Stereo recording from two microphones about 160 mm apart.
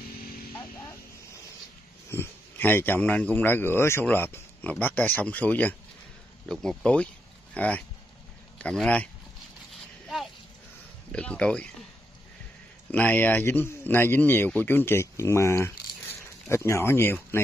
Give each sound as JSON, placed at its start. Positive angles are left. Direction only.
{"t": 2.0, "sound": "speech", "side_deg": 15}
{"t": 9.7, "sound": "a sound", "side_deg": 0}
{"t": 11.1, "sound": "speech", "side_deg": 5}
{"t": 12.9, "sound": "speech", "side_deg": 10}